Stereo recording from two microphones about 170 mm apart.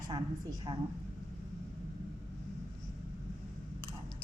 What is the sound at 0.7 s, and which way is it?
Speech, 30° right (ahead or behind).